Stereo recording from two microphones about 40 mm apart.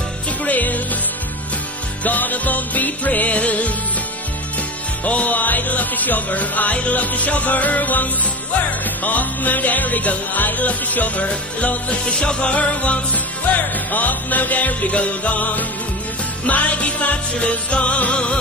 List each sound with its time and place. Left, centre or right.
0.5 s music: left
2.0 s music: left
5.0 s music: left
12.1 s music: left
12.4 s music: left